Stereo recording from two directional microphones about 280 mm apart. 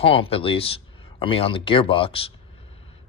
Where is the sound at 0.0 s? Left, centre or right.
Centre.